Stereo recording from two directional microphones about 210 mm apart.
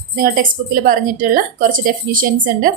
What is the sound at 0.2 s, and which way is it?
A woman's voice, 45° right (ahead or behind).